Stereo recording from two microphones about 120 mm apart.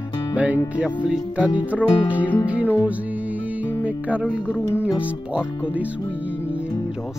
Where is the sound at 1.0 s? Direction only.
10° right (ahead or behind).